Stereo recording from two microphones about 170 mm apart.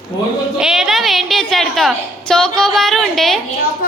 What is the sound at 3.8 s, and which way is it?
Speech, 60° left (ahead or behind).